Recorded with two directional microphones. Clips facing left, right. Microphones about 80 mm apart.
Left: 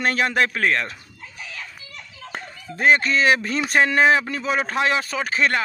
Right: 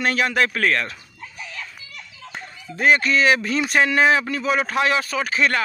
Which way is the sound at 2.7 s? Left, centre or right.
Left.